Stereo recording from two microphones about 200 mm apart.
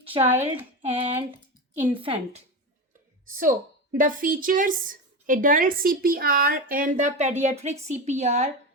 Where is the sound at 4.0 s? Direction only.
45° right (ahead or behind).